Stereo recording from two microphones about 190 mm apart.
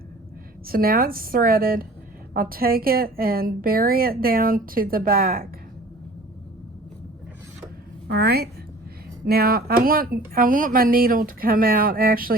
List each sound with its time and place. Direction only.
0.7 s speech: 50° right (ahead or behind)
8.0 s a woman's voice: 55° right (ahead or behind)